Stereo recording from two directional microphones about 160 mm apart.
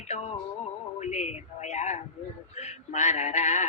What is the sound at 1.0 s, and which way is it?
Male singing, 45° left (ahead or behind).